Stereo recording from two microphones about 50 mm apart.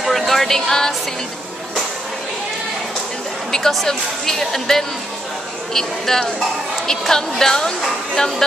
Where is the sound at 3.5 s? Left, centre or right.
Centre.